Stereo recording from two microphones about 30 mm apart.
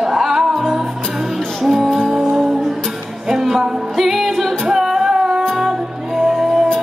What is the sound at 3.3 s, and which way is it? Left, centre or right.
Music, centre.